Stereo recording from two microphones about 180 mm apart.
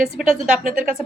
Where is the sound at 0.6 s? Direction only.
50° right (ahead or behind).